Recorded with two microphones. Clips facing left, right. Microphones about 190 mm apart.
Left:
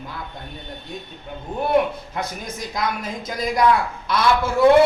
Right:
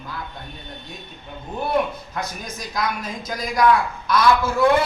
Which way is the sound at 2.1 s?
25° left (ahead or behind).